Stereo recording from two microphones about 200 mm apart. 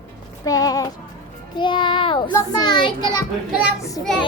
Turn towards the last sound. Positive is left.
turn(degrees=15)  # may be behind; listen again after turning